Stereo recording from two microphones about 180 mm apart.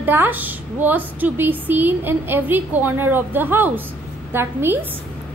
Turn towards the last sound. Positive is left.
turn(degrees=-10)  # may be behind; listen again after turning